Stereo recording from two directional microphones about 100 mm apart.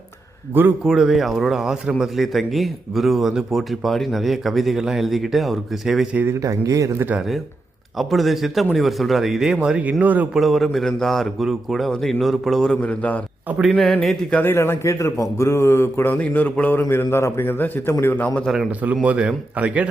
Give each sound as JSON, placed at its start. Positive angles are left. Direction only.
{"t": 0.9, "sound": "speech", "side_deg": -5}
{"t": 6.2, "sound": "speech", "side_deg": -30}
{"t": 7.2, "sound": "a man's voice", "side_deg": 0}
{"t": 10.3, "sound": "speech", "side_deg": 0}
{"t": 12.8, "sound": "a man's voice", "side_deg": 15}
{"t": 13.7, "sound": "a man's voice", "side_deg": 0}
{"t": 14.3, "sound": "a man's voice", "side_deg": 25}
{"t": 19.0, "sound": "a man's voice", "side_deg": -10}